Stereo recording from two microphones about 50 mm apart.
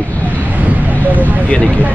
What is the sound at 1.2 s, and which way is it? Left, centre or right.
Speech, left.